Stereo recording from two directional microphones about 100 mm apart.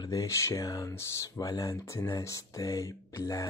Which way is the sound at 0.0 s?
35° left (ahead or behind).